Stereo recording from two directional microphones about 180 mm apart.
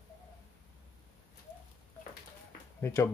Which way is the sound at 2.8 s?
15° left (ahead or behind).